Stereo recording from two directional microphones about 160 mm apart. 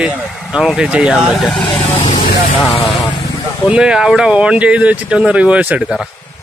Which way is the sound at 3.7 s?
5° right (ahead or behind).